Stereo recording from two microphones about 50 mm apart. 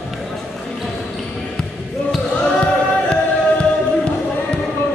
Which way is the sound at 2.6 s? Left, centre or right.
Left.